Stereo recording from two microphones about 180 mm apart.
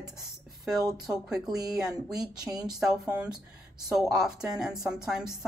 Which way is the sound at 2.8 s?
5° right (ahead or behind).